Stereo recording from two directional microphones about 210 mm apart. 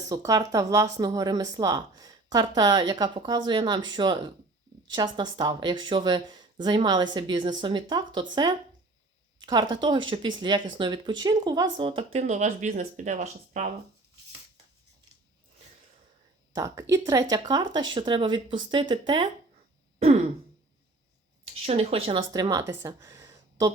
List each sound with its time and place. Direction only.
0.1 s speech: 15° right (ahead or behind); by 13.7 s 35° right (ahead or behind)
16.6 s speech: 15° right (ahead or behind)
21.7 s speech: 30° right (ahead or behind)